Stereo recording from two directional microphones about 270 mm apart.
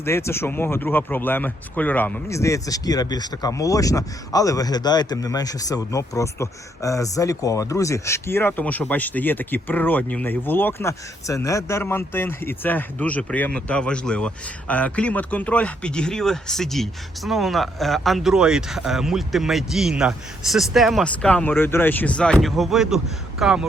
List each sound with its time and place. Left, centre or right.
0.0 s speech: centre